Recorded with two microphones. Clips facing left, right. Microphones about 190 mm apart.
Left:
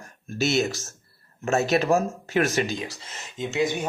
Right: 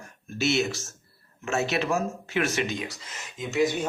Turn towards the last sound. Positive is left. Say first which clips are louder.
# even
turn(degrees=15)  # may be behind; listen again after turning